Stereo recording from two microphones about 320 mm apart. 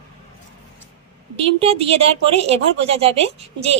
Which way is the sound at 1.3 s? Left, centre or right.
Centre.